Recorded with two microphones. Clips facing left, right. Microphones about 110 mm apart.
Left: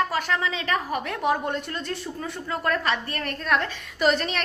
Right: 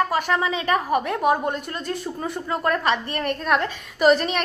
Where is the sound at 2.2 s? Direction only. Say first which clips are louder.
Right 4 dB; 20° right (ahead or behind).